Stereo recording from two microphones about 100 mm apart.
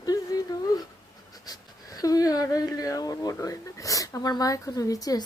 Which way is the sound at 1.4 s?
40° left (ahead or behind).